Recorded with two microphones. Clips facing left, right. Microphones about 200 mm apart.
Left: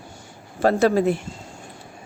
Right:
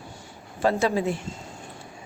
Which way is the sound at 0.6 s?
55° left (ahead or behind).